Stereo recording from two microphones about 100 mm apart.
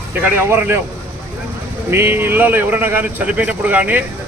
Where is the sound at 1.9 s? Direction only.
25° right (ahead or behind).